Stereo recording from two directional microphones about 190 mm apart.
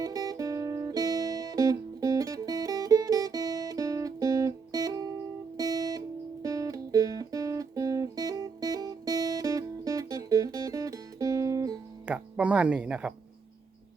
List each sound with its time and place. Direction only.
0.0 s music: 20° right (ahead or behind)
5.5 s guitar: 20° right (ahead or behind)
6.4 s music: 15° right (ahead or behind)
12.0 s speech: 5° right (ahead or behind)